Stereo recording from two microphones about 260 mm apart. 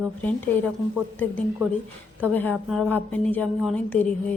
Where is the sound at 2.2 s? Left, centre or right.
Centre.